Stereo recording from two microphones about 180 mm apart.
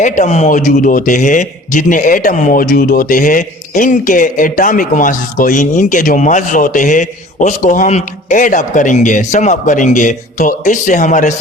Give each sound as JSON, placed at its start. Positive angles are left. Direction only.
{"t": 0.0, "sound": "speech", "side_deg": 40}